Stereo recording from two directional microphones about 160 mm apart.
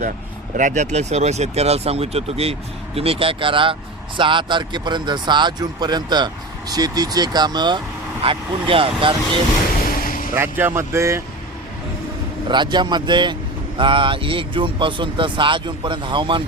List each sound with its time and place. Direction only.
0.5 s speech: 50° right (ahead or behind); by 9.1 s 35° right (ahead or behind)
9.9 s artillery fire: 60° left (ahead or behind)
10.3 s speech: 15° right (ahead or behind)
12.5 s speech: 30° right (ahead or behind)